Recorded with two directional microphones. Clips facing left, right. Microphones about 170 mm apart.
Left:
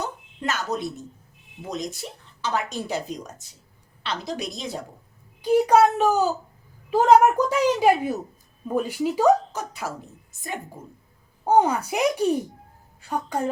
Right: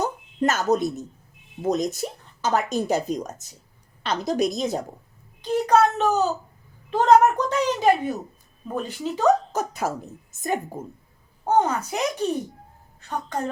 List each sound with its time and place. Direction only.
0.0 s speech: 40° right (ahead or behind)
5.4 s a woman's voice: 10° left (ahead or behind)
9.5 s speech: 45° right (ahead or behind)
11.4 s a woman's voice: 10° left (ahead or behind)